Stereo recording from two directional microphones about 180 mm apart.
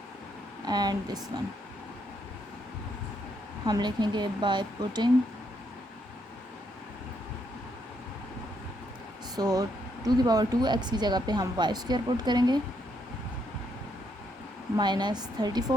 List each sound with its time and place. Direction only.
0.6 s a woman's voice: 20° right (ahead or behind)
3.7 s a woman's voice: 25° right (ahead or behind)
9.3 s a woman's voice: 20° right (ahead or behind)
14.8 s a woman's voice: 25° right (ahead or behind)